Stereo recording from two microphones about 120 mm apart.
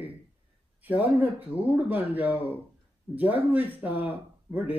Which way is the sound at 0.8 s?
15° right (ahead or behind).